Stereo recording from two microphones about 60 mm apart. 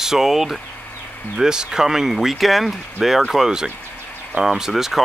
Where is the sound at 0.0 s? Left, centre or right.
Centre.